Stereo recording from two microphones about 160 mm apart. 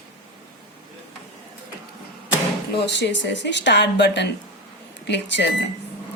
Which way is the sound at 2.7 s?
90° left.